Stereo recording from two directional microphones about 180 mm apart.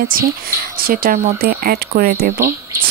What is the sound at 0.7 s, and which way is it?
Speech, 55° right (ahead or behind).